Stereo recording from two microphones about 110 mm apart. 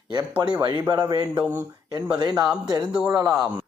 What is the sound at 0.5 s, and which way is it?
Speech, 40° right (ahead or behind).